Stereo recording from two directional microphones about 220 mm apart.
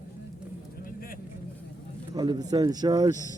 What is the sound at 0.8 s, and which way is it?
Vehicle, 40° left (ahead or behind).